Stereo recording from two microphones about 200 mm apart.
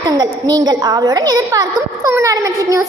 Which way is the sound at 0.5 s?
20° right (ahead or behind).